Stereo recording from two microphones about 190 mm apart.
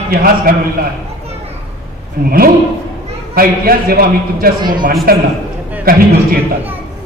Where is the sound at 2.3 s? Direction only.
50° right (ahead or behind).